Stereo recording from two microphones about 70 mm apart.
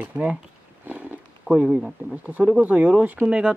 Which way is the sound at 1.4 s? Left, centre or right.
Centre.